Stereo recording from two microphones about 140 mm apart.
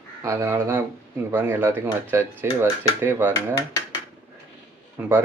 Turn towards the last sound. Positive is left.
turn(degrees=-10)  # may be behind; listen again after turning